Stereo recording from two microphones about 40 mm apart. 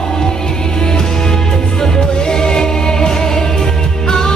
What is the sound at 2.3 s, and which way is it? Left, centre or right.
Music, centre.